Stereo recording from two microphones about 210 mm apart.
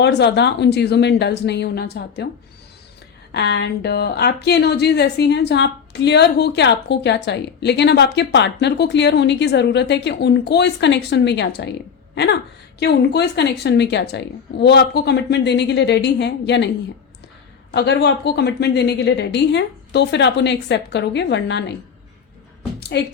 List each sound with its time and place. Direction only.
0.0 s a woman's voice: 55° left (ahead or behind)
3.3 s a woman's voice: 55° left (ahead or behind)
17.7 s speech: 55° left (ahead or behind)
22.8 s a woman's voice: 50° left (ahead or behind)